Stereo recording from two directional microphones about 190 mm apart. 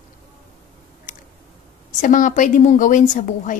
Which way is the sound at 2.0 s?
40° left (ahead or behind).